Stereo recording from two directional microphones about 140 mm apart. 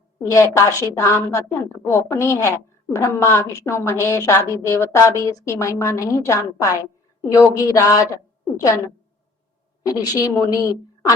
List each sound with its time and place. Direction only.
0.2 s a woman's voice: 20° left (ahead or behind)
9.8 s a woman's voice: 30° left (ahead or behind)